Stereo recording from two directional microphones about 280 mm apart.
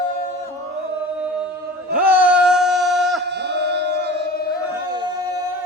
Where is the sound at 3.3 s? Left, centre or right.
Right.